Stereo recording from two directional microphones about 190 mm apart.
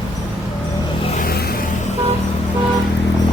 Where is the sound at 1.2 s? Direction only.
55° left (ahead or behind).